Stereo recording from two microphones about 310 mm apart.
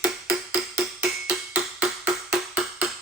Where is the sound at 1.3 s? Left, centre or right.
Centre.